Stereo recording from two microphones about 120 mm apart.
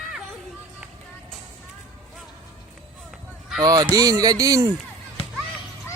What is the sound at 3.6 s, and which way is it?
Speech, 30° right (ahead or behind).